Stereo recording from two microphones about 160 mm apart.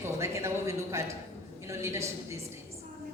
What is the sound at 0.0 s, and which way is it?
A woman's voice, 15° right (ahead or behind).